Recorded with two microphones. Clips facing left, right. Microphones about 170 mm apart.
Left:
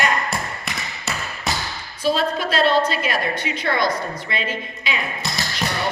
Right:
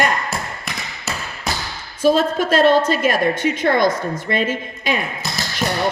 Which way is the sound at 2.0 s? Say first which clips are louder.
Right 5 dB; 45° right (ahead or behind).